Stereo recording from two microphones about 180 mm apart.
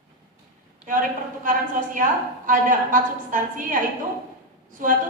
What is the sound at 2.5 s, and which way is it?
A woman's voice, 45° right (ahead or behind).